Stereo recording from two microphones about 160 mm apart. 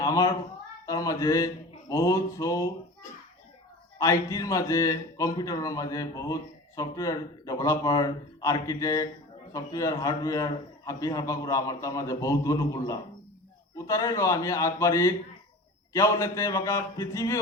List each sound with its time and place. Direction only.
0.0 s a sound: 20° left (ahead or behind)
0.9 s a man's voice: 20° left (ahead or behind)
3.9 s a man's voice: 20° left (ahead or behind)